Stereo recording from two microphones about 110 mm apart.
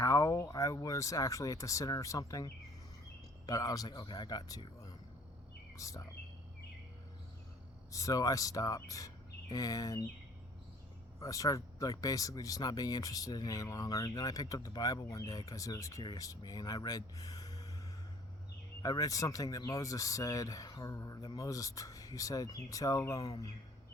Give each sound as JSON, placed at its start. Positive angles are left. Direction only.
{"t": 0.0, "sound": "speech", "side_deg": 30}
{"t": 5.7, "sound": "bird", "side_deg": 30}
{"t": 7.9, "sound": "speech", "side_deg": 30}
{"t": 11.2, "sound": "speech", "side_deg": 30}
{"t": 18.8, "sound": "speech", "side_deg": 35}